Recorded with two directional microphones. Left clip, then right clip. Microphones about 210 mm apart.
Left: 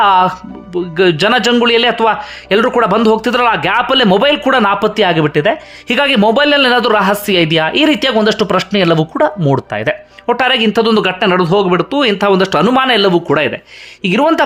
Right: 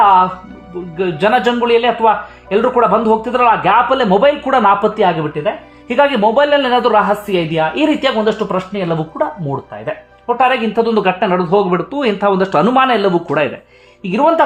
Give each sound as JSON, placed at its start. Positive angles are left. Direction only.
{"t": 0.0, "sound": "music", "side_deg": 20}
{"t": 0.9, "sound": "a man's voice", "side_deg": 20}